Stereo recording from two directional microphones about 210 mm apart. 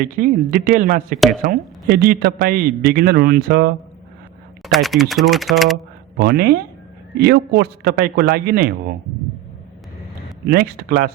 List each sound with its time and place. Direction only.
0.0 s a man's voice: 40° right (ahead or behind)
4.6 s speech: centre (ahead or behind)
6.1 s a man's voice: 45° right (ahead or behind)
10.4 s a man's voice: 45° right (ahead or behind)